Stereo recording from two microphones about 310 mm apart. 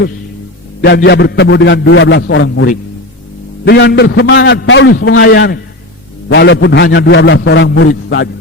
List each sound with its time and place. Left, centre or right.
0.8 s a man's voice: left